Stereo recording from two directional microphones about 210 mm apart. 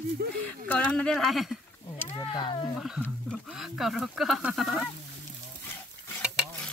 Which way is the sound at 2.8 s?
5° right (ahead or behind).